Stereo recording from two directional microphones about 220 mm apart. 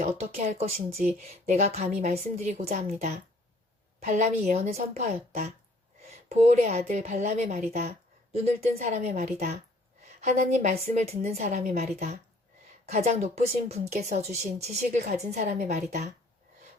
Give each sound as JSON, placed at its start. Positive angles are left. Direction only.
{"t": 0.3, "sound": "a woman's voice", "side_deg": -30}